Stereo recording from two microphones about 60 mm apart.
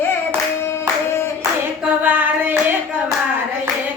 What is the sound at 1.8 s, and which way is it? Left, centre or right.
Hands, right.